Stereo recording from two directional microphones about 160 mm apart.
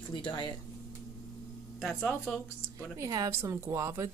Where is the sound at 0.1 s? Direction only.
30° left (ahead or behind).